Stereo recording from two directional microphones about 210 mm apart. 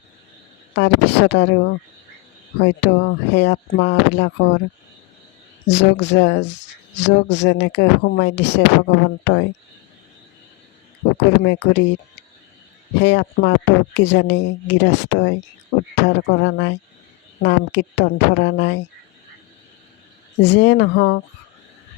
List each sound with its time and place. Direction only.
0.8 s speech: 55° left (ahead or behind)
5.6 s speech: 55° left (ahead or behind)
11.2 s speech: 55° left (ahead or behind)
13.0 s speech: 55° left (ahead or behind)
20.4 s speech: 55° left (ahead or behind)